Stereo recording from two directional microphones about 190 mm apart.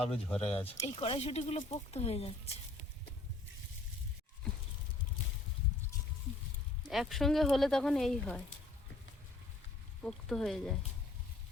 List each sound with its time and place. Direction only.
0.3 s speech: 5° left (ahead or behind)
0.8 s speech: 25° left (ahead or behind)
6.8 s speech: centre (ahead or behind)
10.0 s speech: centre (ahead or behind)